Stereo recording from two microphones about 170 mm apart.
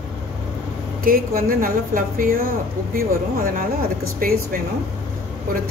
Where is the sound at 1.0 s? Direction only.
60° right (ahead or behind).